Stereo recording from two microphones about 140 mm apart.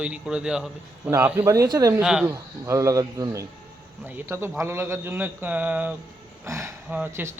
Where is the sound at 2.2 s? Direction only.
20° right (ahead or behind).